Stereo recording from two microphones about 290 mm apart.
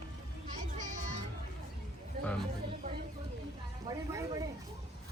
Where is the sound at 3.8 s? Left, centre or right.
Centre.